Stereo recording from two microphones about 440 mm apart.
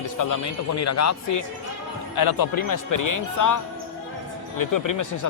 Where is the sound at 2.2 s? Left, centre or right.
Left.